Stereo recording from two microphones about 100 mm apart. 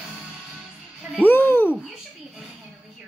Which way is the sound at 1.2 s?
20° left (ahead or behind).